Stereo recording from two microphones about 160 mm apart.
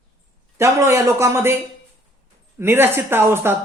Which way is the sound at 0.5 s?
15° right (ahead or behind).